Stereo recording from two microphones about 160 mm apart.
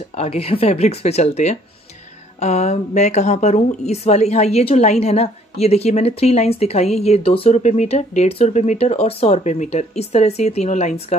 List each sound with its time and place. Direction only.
0.1 s a woman's voice: 40° left (ahead or behind)